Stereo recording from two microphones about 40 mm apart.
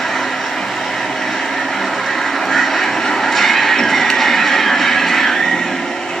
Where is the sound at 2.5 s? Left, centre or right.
Centre.